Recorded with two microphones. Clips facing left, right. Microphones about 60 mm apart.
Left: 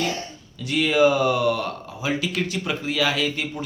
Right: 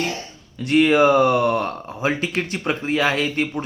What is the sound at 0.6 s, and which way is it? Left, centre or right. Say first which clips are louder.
Speech: right 4 dB; right.